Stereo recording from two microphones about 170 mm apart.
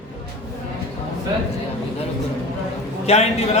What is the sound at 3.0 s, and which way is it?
Speech, 40° left (ahead or behind).